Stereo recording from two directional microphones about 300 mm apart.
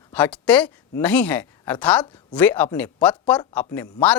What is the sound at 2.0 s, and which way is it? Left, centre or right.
Speech, centre.